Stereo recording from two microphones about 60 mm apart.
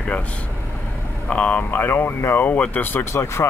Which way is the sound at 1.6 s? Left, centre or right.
Left.